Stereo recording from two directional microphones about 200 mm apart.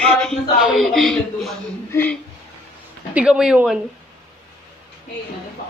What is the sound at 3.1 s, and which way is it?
Speech, 5° right (ahead or behind).